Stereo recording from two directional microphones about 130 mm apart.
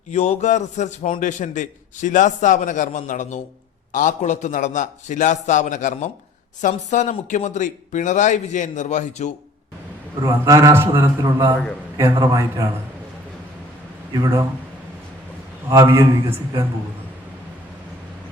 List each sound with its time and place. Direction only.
0.1 s speech: 60° left (ahead or behind)
10.2 s a man's voice: 25° right (ahead or behind)
14.1 s a man's voice: 25° right (ahead or behind)
15.7 s a man's voice: 25° right (ahead or behind)